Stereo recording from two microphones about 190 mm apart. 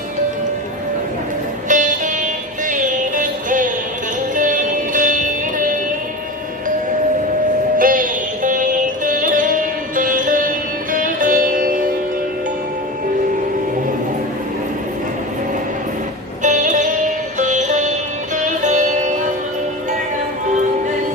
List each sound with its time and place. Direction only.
1.6 s music: 40° right (ahead or behind)
7.8 s music: 45° right (ahead or behind)
16.4 s music: 40° right (ahead or behind)